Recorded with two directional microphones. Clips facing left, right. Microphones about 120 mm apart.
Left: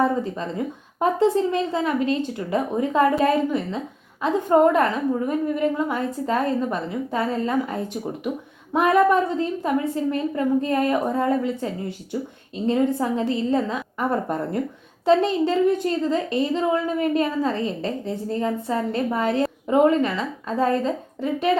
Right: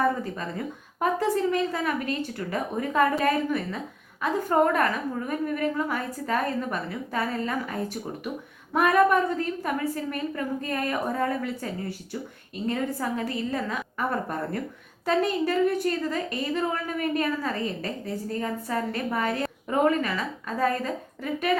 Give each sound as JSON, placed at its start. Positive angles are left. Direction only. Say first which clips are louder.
{"t": 0.0, "sound": "a woman's voice", "louder": "left 4 dB", "side_deg": 25}